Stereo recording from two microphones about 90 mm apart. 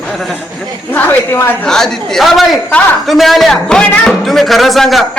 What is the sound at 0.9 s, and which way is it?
Speech, 25° left (ahead or behind).